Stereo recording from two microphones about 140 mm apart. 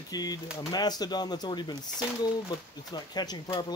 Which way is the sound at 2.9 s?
30° left (ahead or behind).